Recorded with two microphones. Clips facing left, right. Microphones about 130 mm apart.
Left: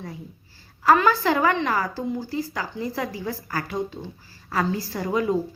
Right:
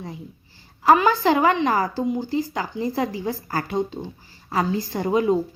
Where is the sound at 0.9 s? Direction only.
20° right (ahead or behind).